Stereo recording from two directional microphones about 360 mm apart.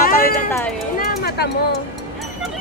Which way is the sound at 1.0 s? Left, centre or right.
Left.